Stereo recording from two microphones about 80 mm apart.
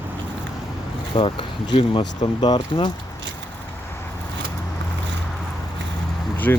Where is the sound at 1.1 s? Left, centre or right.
Left.